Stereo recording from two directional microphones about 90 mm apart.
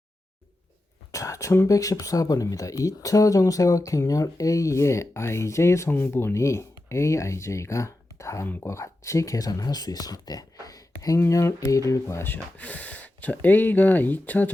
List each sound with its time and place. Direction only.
1.1 s speech: 35° left (ahead or behind); by 14.5 s 20° left (ahead or behind)